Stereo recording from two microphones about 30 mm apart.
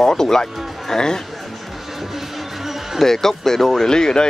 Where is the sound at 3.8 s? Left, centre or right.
Left.